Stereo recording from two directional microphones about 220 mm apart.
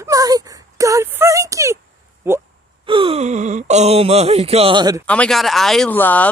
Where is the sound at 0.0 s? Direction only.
15° right (ahead or behind).